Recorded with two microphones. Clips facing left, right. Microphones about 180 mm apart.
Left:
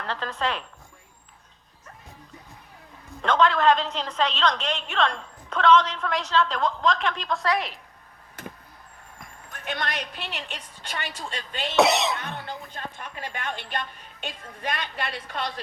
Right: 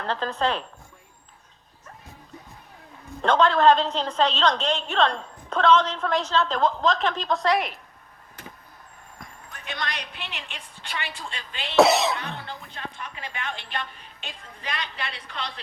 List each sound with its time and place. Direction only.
0.0 s a woman's voice: 35° right (ahead or behind)
3.2 s a woman's voice: 35° right (ahead or behind)
9.5 s a woman's voice: 55° left (ahead or behind)
11.8 s speech: centre (ahead or behind)
12.7 s a woman's voice: 45° left (ahead or behind)